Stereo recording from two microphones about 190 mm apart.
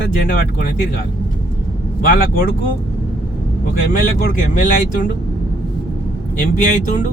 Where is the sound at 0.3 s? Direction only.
50° left (ahead or behind).